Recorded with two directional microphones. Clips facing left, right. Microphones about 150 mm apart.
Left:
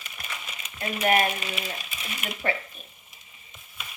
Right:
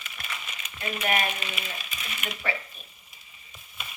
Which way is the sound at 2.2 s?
45° left (ahead or behind).